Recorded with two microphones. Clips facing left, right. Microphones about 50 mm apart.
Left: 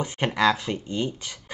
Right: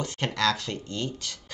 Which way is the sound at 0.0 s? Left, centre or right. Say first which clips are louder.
Left 4 dB; centre.